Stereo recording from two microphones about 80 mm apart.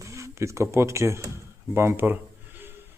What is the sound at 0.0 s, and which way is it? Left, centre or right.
A man's voice, right.